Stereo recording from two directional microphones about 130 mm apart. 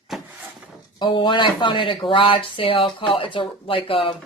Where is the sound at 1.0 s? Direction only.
35° left (ahead or behind).